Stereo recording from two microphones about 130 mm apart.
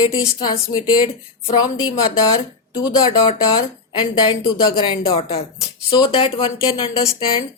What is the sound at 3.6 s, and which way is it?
Speech, 35° left (ahead or behind).